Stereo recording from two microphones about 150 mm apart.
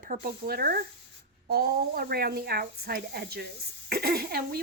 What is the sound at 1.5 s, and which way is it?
Speech, 90° right.